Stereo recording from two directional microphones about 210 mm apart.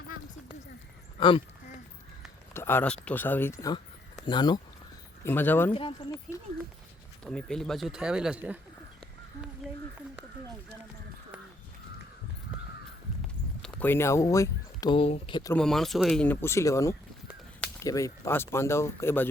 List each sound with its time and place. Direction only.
1.2 s speech: 20° left (ahead or behind)
2.5 s speech: 10° left (ahead or behind)
5.2 s speech: 10° left (ahead or behind)
5.7 s speech: 20° left (ahead or behind)
7.3 s speech: 5° left (ahead or behind)
13.6 s speech: 5° left (ahead or behind); by 15.5 s 20° left (ahead or behind)
15.5 s speech: centre (ahead or behind)